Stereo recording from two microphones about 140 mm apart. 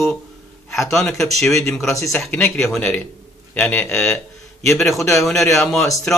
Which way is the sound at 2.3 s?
5° left (ahead or behind).